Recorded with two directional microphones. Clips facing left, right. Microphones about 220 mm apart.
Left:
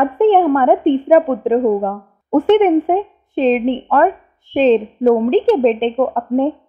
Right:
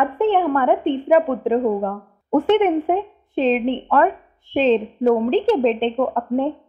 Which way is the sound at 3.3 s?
50° left (ahead or behind).